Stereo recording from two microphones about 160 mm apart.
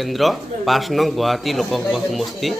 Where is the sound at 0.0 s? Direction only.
Centre (ahead or behind).